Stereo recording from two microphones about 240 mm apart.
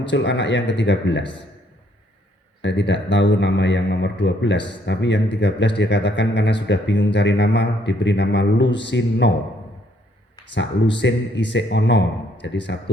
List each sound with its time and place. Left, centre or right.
0.0 s a man's voice: left
2.6 s a man's voice: left
11.0 s a man's voice: left